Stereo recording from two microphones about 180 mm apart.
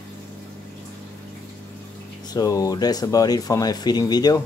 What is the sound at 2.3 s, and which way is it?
Speech, 20° left (ahead or behind).